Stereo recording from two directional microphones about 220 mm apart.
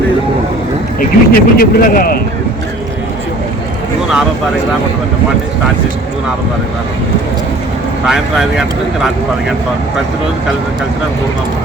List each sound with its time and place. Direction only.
0.9 s speech: 40° left (ahead or behind)
8.0 s speech: centre (ahead or behind)